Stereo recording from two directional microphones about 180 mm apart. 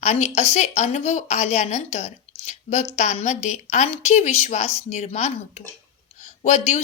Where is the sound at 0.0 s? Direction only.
40° left (ahead or behind).